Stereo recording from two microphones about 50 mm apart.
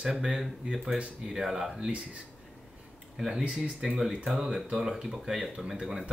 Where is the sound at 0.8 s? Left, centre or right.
Right.